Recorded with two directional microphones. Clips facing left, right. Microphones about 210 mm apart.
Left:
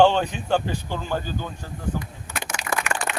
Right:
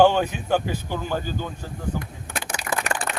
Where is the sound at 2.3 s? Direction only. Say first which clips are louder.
Right 1 dB; 55° right (ahead or behind).